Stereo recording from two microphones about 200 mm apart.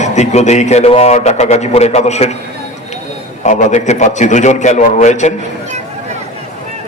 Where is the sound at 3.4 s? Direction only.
35° left (ahead or behind).